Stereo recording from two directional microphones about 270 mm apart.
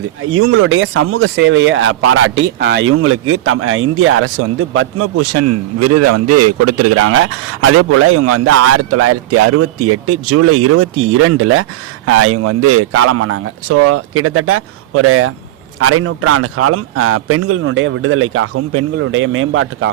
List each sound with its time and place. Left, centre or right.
0.2 s speech: right
18.9 s speech: right